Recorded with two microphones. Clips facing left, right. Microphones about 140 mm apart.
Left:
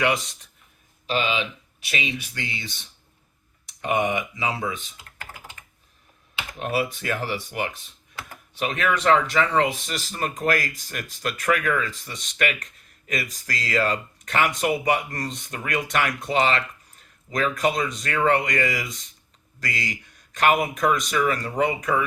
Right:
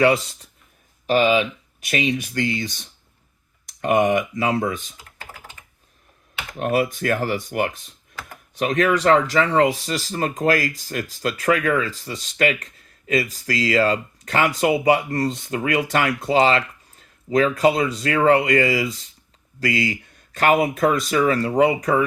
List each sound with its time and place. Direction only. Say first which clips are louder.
1.0 s speech: right 8 dB; 50° right (ahead or behind)
6.6 s speech: right 5 dB; 45° right (ahead or behind)